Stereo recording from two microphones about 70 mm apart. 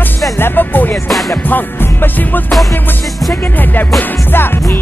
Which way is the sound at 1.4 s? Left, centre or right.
Left.